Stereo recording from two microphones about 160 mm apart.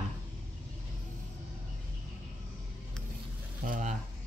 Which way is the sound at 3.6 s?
55° right (ahead or behind).